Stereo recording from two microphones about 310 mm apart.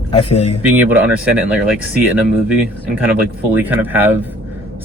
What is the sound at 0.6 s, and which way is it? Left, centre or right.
Speech, centre.